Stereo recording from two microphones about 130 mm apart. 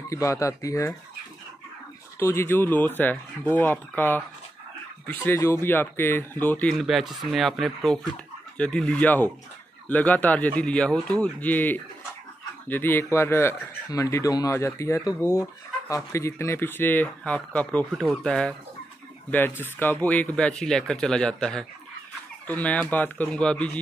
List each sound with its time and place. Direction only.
0.1 s speech: 25° left (ahead or behind)
2.1 s speech: 20° left (ahead or behind)
19.8 s speech: 15° left (ahead or behind)